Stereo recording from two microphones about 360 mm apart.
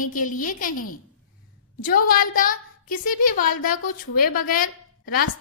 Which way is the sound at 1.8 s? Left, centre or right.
Left.